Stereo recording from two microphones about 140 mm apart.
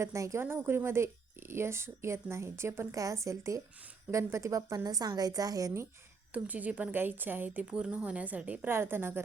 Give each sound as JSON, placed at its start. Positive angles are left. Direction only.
{"t": 0.0, "sound": "speech", "side_deg": -20}
{"t": 6.3, "sound": "a woman's voice", "side_deg": -10}